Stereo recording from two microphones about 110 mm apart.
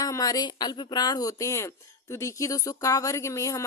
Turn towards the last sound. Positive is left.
turn(degrees=30)  # may be behind; listen again after turning